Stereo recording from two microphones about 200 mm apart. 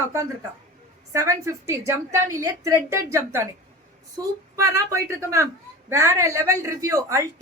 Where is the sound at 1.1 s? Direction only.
15° right (ahead or behind).